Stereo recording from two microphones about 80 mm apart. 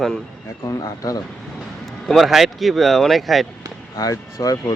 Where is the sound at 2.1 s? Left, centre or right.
Centre.